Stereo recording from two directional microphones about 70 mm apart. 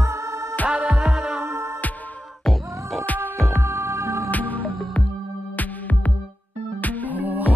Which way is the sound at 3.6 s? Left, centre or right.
Right.